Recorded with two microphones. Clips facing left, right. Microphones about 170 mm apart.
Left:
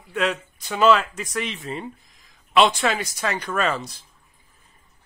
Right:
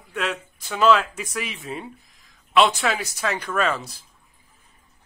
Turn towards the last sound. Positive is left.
turn(degrees=-10)  # may be behind; listen again after turning